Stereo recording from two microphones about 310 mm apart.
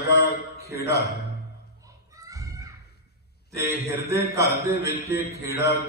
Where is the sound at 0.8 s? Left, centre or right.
Left.